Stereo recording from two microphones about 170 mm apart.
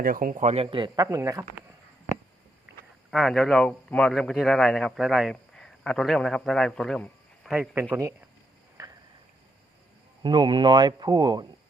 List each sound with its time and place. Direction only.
0.0 s speech: 55° right (ahead or behind); by 1.0 s 30° right (ahead or behind)
1.0 s speech: 20° right (ahead or behind)
3.1 s a man's voice: centre (ahead or behind); by 8.1 s 15° right (ahead or behind)
8.8 s a sound: 20° right (ahead or behind)
10.2 s speech: 25° right (ahead or behind)